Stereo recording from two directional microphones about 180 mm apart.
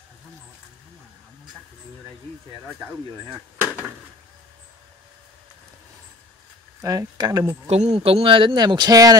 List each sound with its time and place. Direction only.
6.8 s speech: 20° right (ahead or behind)
7.6 s speech: 35° right (ahead or behind); by 9.1 s 20° right (ahead or behind)